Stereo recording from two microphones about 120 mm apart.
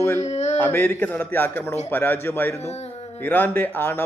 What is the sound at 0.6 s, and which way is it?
A man's voice, 15° left (ahead or behind).